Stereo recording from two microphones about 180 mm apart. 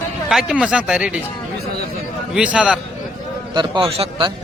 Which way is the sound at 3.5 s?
25° right (ahead or behind).